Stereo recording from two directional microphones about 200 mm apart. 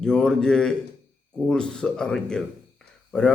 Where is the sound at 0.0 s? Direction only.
5° left (ahead or behind).